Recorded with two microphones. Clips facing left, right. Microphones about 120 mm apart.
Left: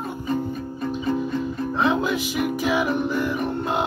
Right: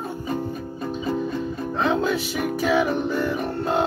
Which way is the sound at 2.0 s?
10° left (ahead or behind).